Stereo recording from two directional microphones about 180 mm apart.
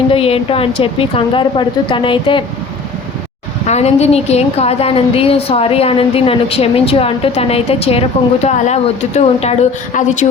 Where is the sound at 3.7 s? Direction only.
35° left (ahead or behind).